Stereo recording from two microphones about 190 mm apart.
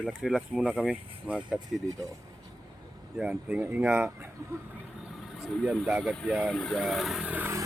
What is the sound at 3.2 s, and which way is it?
Speech, 5° right (ahead or behind).